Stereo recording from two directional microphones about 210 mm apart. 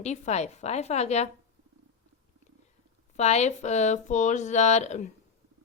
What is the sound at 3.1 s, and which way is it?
A woman's voice, 30° left (ahead or behind).